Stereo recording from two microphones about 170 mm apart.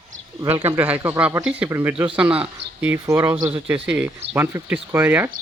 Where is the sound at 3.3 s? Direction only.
25° right (ahead or behind).